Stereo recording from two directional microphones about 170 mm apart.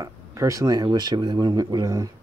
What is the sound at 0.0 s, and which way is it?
Speech, 20° right (ahead or behind).